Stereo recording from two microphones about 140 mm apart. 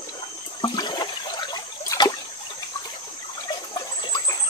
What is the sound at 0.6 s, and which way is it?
Toilet flush, 30° left (ahead or behind).